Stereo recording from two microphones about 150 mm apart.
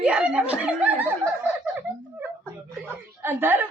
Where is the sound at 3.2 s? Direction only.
15° right (ahead or behind).